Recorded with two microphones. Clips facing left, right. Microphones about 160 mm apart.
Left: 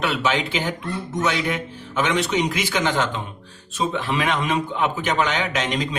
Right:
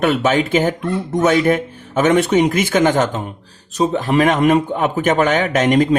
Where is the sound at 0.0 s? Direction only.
50° right (ahead or behind).